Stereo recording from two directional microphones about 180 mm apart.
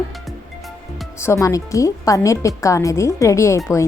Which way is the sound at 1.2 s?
15° left (ahead or behind).